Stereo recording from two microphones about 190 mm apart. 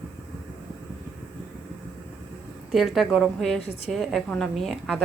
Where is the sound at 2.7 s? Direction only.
Centre (ahead or behind).